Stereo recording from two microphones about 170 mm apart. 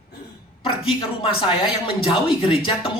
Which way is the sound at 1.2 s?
30° left (ahead or behind).